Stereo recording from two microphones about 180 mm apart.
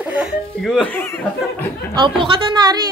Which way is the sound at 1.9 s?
25° right (ahead or behind).